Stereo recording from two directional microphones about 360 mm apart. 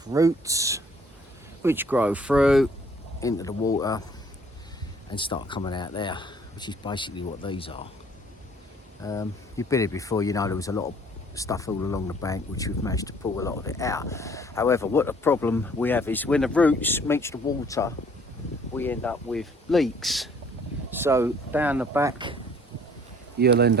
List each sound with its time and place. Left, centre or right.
0.0 s speech: centre
3.2 s speech: centre
5.1 s speech: centre
9.0 s speech: centre
23.4 s speech: right